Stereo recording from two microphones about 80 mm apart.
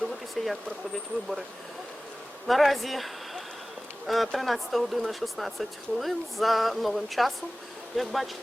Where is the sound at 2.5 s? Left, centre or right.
Centre.